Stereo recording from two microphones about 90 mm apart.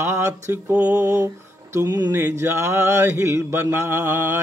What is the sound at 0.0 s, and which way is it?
Mantra, 30° right (ahead or behind).